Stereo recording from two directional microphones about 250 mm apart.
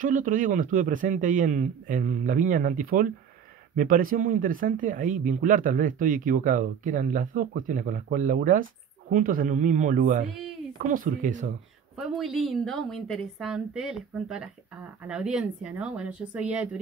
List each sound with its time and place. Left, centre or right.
0.0 s speech: right
12.0 s a woman's voice: centre